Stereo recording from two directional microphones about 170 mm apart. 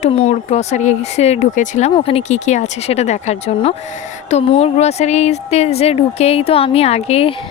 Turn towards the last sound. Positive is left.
turn(degrees=35)  # may be behind; listen again after turning